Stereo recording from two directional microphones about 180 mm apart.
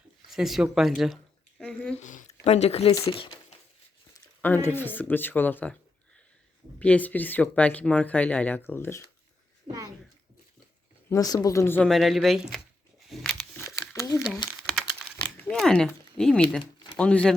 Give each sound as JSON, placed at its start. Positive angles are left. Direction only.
{"t": 0.3, "sound": "speech", "side_deg": 0}
{"t": 2.0, "sound": "a sound", "side_deg": 45}
{"t": 2.4, "sound": "speech", "side_deg": 35}
{"t": 4.4, "sound": "speech", "side_deg": 10}
{"t": 6.7, "sound": "speech", "side_deg": 5}
{"t": 11.1, "sound": "speech", "side_deg": 20}
{"t": 11.9, "sound": "speech", "side_deg": 0}
{"t": 13.1, "sound": "a sound", "side_deg": 0}
{"t": 13.7, "sound": "a sound", "side_deg": 15}
{"t": 14.7, "sound": "typing", "side_deg": 0}
{"t": 15.4, "sound": "a sound", "side_deg": 5}
{"t": 15.9, "sound": "speech", "side_deg": 5}